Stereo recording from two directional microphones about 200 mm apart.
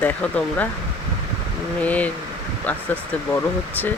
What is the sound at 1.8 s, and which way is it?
Speech, 5° left (ahead or behind).